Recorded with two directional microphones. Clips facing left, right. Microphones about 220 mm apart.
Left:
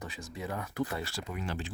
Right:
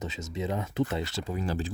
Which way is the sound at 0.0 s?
20° right (ahead or behind).